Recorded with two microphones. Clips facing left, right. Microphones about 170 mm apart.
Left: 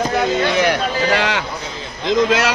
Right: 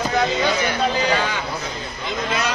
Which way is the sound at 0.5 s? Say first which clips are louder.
Left 3 dB; 75° left (ahead or behind).